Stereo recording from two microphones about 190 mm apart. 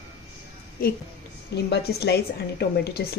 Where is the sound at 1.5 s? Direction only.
60° left (ahead or behind).